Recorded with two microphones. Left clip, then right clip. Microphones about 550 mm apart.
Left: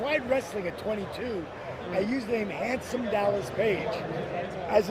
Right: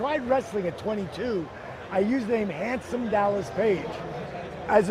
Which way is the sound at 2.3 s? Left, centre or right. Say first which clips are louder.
Right 2 dB; right.